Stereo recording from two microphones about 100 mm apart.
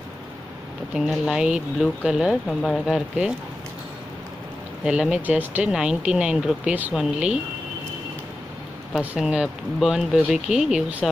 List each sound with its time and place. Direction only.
0.9 s speech: 5° right (ahead or behind)
4.8 s speech: 10° right (ahead or behind)
9.1 s speech: 10° right (ahead or behind)